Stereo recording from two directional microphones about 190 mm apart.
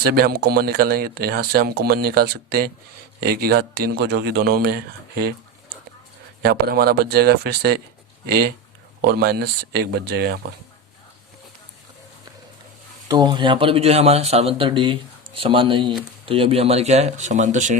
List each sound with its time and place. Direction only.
0.0 s speech: 55° right (ahead or behind)
6.4 s speech: 55° right (ahead or behind)
13.1 s speech: 20° right (ahead or behind); by 17.7 s 40° right (ahead or behind)